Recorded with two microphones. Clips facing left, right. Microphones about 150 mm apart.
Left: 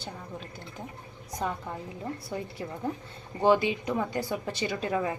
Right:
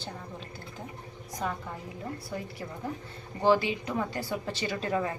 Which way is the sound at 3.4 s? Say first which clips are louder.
Left 1 dB; 20° left (ahead or behind).